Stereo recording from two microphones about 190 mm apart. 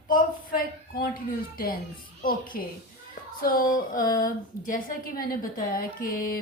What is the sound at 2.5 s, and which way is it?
Speech, 50° left (ahead or behind).